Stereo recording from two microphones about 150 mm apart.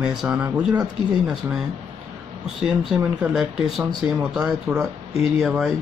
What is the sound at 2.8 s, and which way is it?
Speech, 5° right (ahead or behind).